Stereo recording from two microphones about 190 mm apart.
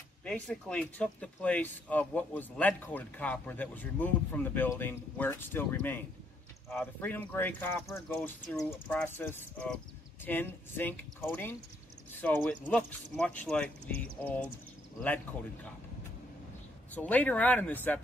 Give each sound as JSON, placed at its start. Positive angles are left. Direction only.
{"t": 0.2, "sound": "speech", "side_deg": 5}
{"t": 16.9, "sound": "speech", "side_deg": 10}